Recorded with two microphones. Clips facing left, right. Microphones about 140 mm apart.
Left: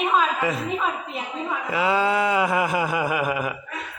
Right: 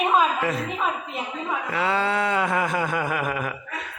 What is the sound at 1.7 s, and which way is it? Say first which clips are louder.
A man's voice: left 3 dB; 10° left (ahead or behind).